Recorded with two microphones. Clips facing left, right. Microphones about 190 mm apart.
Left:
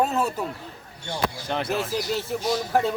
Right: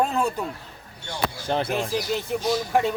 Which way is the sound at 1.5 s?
35° right (ahead or behind).